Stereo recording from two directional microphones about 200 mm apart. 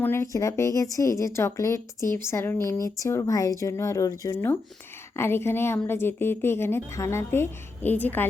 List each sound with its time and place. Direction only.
0.0 s speech: 15° left (ahead or behind)